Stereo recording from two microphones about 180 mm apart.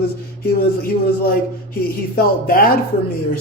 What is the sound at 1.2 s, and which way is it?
A man's voice, 55° left (ahead or behind).